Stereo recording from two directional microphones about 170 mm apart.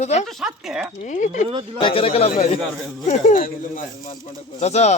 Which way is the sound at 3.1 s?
50° left (ahead or behind).